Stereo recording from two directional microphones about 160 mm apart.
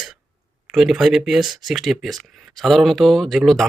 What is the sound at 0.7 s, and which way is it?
Speech, centre (ahead or behind).